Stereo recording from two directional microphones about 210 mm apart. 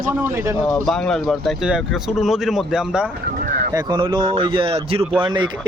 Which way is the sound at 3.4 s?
35° right (ahead or behind).